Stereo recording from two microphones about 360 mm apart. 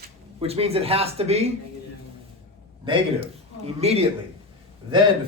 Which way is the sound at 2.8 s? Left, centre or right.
Centre.